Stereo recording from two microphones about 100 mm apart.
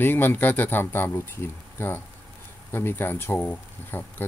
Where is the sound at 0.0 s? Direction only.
20° left (ahead or behind).